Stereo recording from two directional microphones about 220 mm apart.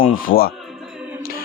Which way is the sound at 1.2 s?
40° left (ahead or behind).